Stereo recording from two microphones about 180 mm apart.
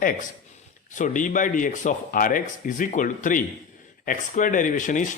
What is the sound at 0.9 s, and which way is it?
Speech, 45° left (ahead or behind).